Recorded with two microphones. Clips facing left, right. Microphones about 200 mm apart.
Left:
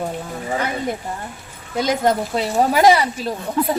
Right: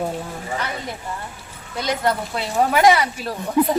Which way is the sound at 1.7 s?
45° left (ahead or behind).